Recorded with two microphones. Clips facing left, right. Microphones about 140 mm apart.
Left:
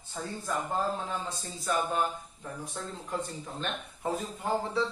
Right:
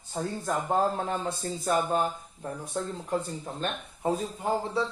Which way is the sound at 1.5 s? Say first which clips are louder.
Right 4 dB; 45° right (ahead or behind).